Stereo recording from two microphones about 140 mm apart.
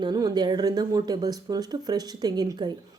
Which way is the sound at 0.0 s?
30° right (ahead or behind).